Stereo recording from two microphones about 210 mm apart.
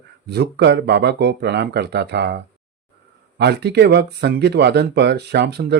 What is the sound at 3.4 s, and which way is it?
Speech, 50° right (ahead or behind).